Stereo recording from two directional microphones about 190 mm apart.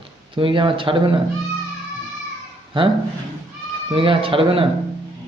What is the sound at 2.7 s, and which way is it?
Speech, 25° right (ahead or behind).